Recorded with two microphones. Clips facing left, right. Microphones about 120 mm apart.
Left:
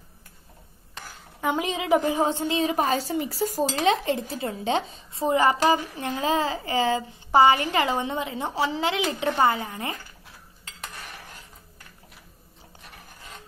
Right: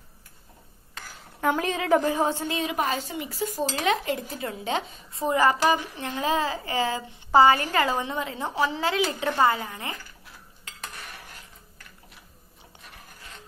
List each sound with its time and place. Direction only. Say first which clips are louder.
1.5 s a woman's voice: even; 15° left (ahead or behind)